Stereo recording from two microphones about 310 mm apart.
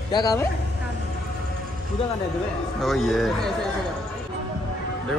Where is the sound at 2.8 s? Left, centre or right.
Centre.